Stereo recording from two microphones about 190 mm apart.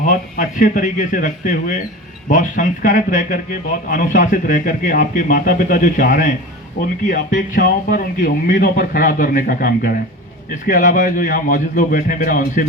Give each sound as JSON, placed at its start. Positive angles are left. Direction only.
{"t": 0.0, "sound": "speech", "side_deg": 45}